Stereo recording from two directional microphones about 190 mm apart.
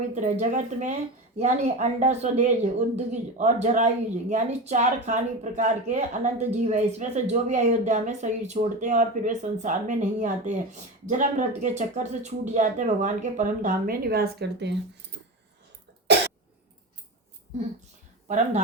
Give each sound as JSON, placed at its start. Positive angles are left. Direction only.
{"t": 0.1, "sound": "a woman's voice", "side_deg": -40}
{"t": 18.3, "sound": "a woman's voice", "side_deg": -40}